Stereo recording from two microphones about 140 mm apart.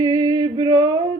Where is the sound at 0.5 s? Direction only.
30° right (ahead or behind).